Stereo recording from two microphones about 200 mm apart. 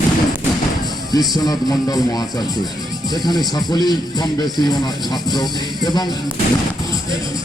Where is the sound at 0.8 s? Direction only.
20° left (ahead or behind).